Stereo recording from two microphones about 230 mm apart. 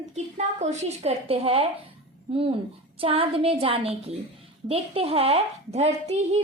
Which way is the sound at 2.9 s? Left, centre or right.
Right.